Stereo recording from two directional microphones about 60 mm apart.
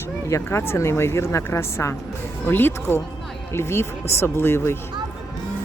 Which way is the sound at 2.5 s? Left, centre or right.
Left.